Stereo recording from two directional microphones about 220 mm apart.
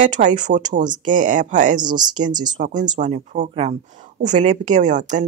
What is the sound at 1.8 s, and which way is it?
Speech, 20° right (ahead or behind).